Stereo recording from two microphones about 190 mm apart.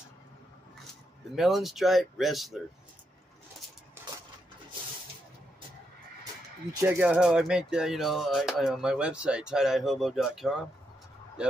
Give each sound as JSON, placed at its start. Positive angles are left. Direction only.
{"t": 1.3, "sound": "speech", "side_deg": 0}
{"t": 6.8, "sound": "speech", "side_deg": -10}